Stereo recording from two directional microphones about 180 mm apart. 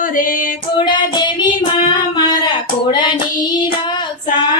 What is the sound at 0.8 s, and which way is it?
Child singing, 25° left (ahead or behind).